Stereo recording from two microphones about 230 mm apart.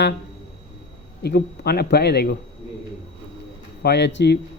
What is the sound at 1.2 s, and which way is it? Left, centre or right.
Speech, left.